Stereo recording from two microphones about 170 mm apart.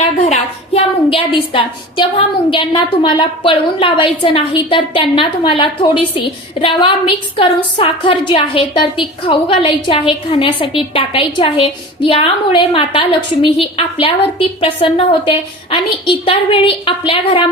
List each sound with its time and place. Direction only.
0.2 s a woman's voice: 40° left (ahead or behind)